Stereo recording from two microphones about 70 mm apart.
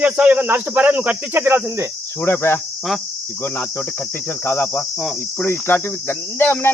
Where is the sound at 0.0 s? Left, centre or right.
Right.